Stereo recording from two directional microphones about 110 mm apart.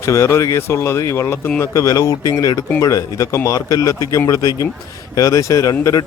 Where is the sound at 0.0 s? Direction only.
25° left (ahead or behind).